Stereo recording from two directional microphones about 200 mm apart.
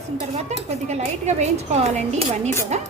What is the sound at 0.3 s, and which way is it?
A woman's voice, 35° right (ahead or behind).